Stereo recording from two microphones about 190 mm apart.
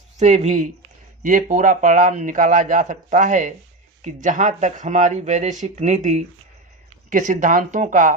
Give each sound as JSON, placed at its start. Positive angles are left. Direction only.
{"t": 0.2, "sound": "speech", "side_deg": -35}